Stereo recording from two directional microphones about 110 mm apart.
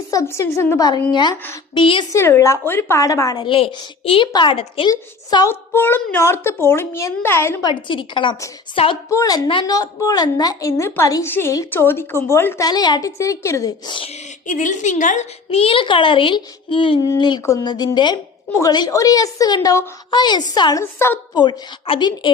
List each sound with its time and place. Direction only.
0.1 s a child's voice: 30° left (ahead or behind)
0.8 s a woman's voice: 40° left (ahead or behind)
2.1 s a child's voice: 25° left (ahead or behind)
3.4 s a child's voice: 50° left (ahead or behind)
4.3 s a woman's voice: 40° left (ahead or behind)
5.5 s a child's voice: 20° left (ahead or behind)
7.6 s a child's voice: 45° left (ahead or behind)
9.0 s a woman's voice: 30° left (ahead or behind)
12.6 s a child's voice: 40° left (ahead or behind)
13.8 s a child's voice: 50° left (ahead or behind)
14.8 s a child's voice: 90° left; by 20.8 s 40° left (ahead or behind)
21.8 s a child's voice: 45° left (ahead or behind)